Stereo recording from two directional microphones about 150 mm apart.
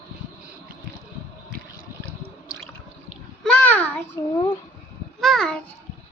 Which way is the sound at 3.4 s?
10° left (ahead or behind).